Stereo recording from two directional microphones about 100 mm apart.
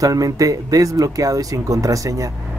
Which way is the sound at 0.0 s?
35° right (ahead or behind).